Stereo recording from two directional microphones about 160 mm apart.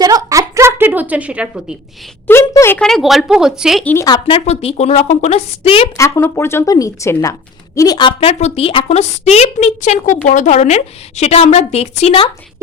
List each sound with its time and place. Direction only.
0.0 s a sound: 20° right (ahead or behind)
2.2 s a sound: 15° left (ahead or behind)
2.8 s speech: centre (ahead or behind)
3.8 s speech: 15° left (ahead or behind)
4.1 s a woman's voice: 35° left (ahead or behind)
6.0 s a woman's voice: 15° left (ahead or behind); by 12.3 s 35° left (ahead or behind)